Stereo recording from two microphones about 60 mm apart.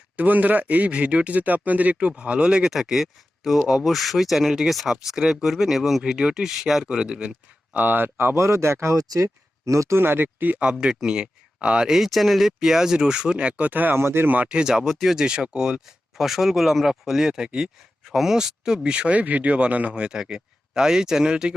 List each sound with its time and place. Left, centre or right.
0.2 s speech: right
8.4 s speech: right
10.0 s speech: right
10.6 s speech: centre
11.9 s speech: centre; by 14.3 s right
14.3 s speech: centre
18.0 s speech: centre